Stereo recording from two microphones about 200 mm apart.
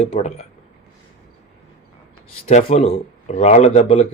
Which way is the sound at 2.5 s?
35° left (ahead or behind).